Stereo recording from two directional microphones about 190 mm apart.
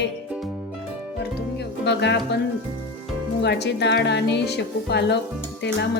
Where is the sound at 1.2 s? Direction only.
65° left (ahead or behind).